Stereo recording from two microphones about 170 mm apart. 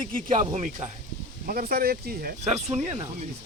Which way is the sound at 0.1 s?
55° right (ahead or behind).